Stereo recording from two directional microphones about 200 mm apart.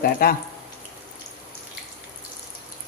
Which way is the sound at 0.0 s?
50° left (ahead or behind).